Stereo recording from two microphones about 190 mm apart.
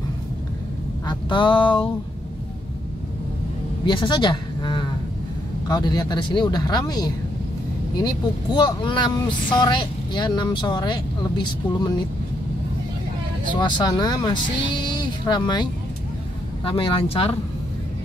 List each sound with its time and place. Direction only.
1.0 s speech: 25° left (ahead or behind)
3.8 s speech: 25° left (ahead or behind)
13.5 s speech: 25° left (ahead or behind)